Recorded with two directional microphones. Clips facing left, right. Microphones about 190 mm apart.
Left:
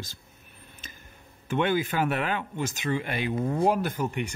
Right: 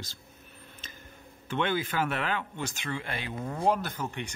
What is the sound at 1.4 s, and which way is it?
Speech, 15° left (ahead or behind).